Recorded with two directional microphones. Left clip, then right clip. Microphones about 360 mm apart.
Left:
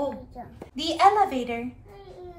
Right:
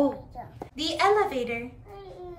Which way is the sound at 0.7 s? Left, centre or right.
Centre.